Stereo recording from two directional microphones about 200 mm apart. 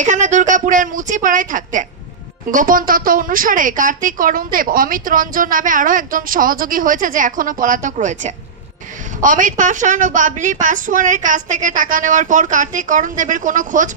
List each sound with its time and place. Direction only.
0.0 s a woman's voice: 40° right (ahead or behind)